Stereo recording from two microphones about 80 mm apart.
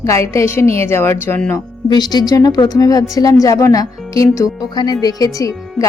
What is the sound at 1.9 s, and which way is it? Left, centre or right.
A woman's voice, left.